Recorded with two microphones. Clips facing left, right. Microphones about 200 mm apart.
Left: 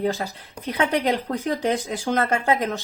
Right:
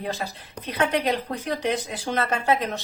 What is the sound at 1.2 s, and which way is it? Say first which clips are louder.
A woman's voice: left 3 dB; 45° left (ahead or behind).